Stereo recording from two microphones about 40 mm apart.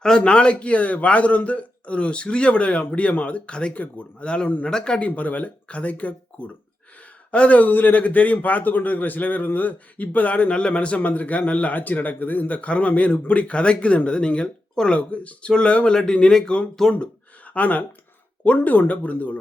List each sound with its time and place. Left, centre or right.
0.2 s a man's voice: left
4.9 s a man's voice: left
7.7 s a man's voice: left
10.5 s a man's voice: left
12.5 s a man's voice: left
16.8 s speech: centre
17.5 s a man's voice: left